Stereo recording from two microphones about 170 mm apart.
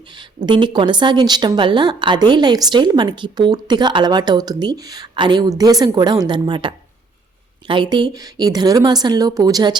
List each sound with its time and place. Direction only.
0.4 s a woman's voice: 25° right (ahead or behind)